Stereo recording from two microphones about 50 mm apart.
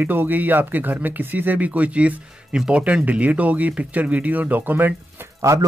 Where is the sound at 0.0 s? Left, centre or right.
Right.